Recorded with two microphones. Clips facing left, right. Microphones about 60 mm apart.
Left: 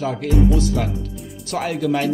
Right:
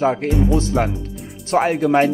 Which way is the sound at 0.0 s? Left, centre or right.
Right.